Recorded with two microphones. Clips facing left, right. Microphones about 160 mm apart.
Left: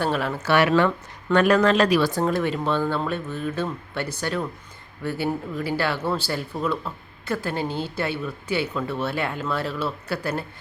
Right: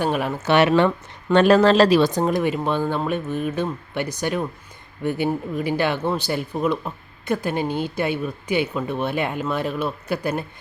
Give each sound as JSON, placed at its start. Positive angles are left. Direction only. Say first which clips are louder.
{"t": 0.0, "sound": "speech", "louder": "right 2 dB", "side_deg": -15}